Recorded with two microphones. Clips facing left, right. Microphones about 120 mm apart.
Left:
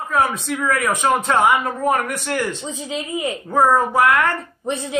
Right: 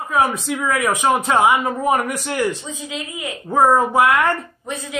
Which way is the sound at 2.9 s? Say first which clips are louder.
Left 6 dB; 30° left (ahead or behind).